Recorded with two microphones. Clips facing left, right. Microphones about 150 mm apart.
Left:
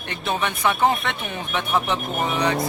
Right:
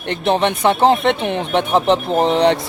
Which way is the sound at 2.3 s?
70° right (ahead or behind).